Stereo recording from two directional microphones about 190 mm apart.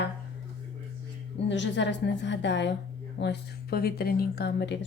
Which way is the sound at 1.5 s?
70° left (ahead or behind).